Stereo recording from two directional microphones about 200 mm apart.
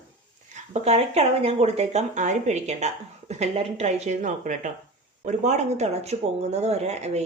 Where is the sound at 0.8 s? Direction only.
30° right (ahead or behind).